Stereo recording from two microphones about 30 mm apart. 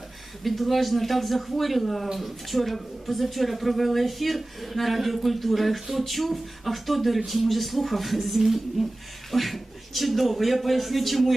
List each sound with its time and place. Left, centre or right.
0.4 s a woman's voice: centre
9.3 s speech: centre